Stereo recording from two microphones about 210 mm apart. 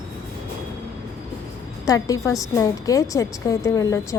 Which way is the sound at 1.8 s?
15° left (ahead or behind).